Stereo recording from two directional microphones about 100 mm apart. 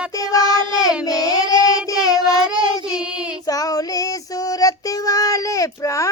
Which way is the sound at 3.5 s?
35° left (ahead or behind).